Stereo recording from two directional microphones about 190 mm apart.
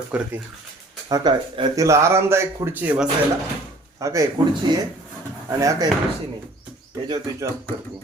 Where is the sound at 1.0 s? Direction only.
20° right (ahead or behind).